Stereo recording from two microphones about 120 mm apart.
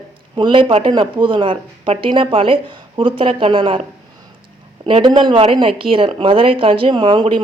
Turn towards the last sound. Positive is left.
turn(degrees=-45)  # may be behind; listen again after turning